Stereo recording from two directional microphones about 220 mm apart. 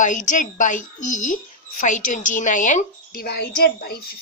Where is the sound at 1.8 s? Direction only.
35° left (ahead or behind).